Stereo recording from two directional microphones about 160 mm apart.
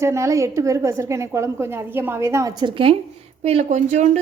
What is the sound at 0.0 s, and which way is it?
A woman's voice, 20° right (ahead or behind).